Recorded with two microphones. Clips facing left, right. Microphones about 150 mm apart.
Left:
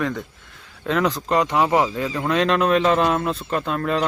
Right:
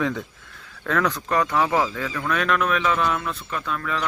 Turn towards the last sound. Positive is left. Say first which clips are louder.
# left 6 dB
turn(degrees=35)  # may be behind; listen again after turning